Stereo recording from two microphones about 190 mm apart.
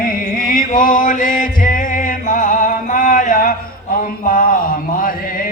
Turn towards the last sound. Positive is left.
turn(degrees=45)  # may be behind; listen again after turning